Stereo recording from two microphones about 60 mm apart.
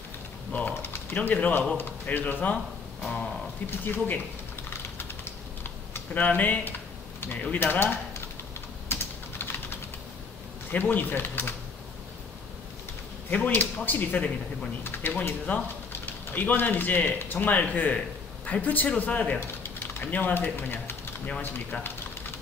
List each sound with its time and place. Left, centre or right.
0.5 s speech: left
2.4 s guitar: left
3.8 s speech: left
6.1 s speech: left
10.7 s speech: left
13.3 s speech: left
14.8 s a man's voice: left